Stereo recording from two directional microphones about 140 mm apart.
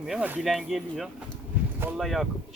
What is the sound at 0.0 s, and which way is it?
Speech, 5° right (ahead or behind).